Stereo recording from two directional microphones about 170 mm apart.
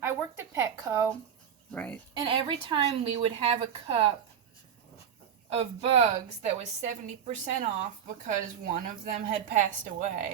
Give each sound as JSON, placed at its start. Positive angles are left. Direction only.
{"t": 0.0, "sound": "a woman's voice", "side_deg": -15}
{"t": 1.7, "sound": "speech", "side_deg": 10}
{"t": 2.1, "sound": "a woman's voice", "side_deg": -30}
{"t": 5.5, "sound": "a woman's voice", "side_deg": -35}